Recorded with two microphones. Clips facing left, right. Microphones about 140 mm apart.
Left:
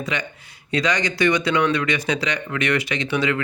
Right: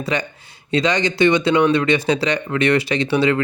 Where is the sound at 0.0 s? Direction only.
35° right (ahead or behind).